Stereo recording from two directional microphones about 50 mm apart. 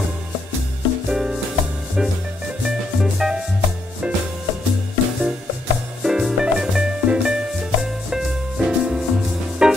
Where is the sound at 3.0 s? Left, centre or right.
Centre.